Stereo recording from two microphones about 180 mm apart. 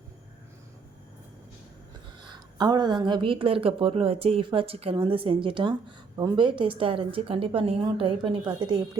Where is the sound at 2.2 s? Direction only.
25° right (ahead or behind).